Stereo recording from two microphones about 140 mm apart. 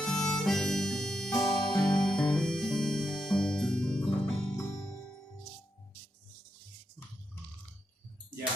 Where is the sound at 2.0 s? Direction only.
5° left (ahead or behind).